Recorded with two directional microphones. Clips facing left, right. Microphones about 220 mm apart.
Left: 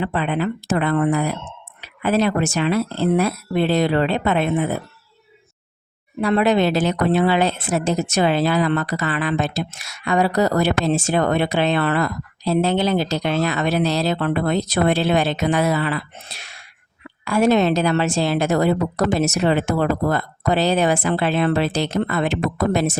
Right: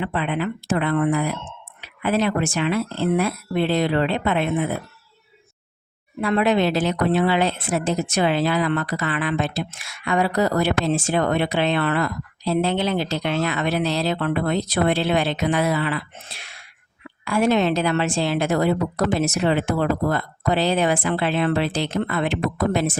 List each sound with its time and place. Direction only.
0.0 s speech: 40° left (ahead or behind)
6.2 s speech: 35° left (ahead or behind)